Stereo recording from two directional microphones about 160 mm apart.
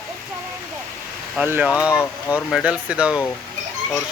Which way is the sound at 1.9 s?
20° left (ahead or behind).